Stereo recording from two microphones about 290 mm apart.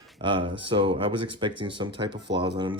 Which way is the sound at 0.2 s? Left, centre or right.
Centre.